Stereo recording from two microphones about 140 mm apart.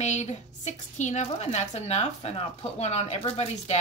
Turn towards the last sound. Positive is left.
turn(degrees=45)  # may be behind; listen again after turning